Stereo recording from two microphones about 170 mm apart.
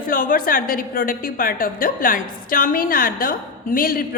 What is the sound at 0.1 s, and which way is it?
A woman's voice, 55° left (ahead or behind).